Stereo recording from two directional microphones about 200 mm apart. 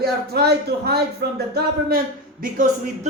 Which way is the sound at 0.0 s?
50° right (ahead or behind).